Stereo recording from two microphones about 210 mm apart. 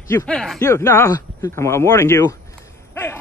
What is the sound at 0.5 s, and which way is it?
Speech, 15° left (ahead or behind).